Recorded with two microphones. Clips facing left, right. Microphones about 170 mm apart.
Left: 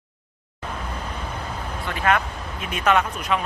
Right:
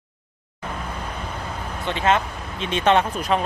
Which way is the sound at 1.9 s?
25° right (ahead or behind).